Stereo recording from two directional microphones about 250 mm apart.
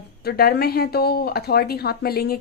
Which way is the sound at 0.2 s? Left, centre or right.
Left.